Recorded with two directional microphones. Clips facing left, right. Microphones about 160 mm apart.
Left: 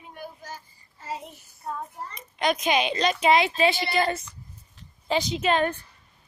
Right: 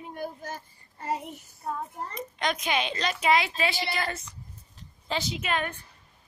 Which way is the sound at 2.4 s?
20° left (ahead or behind).